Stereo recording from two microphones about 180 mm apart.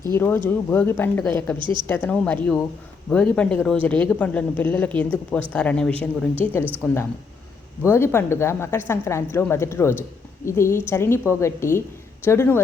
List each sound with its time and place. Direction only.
0.4 s a woman's voice: 10° left (ahead or behind)
1.5 s a woman's voice: 25° right (ahead or behind)
1.9 s a woman's voice: 10° left (ahead or behind)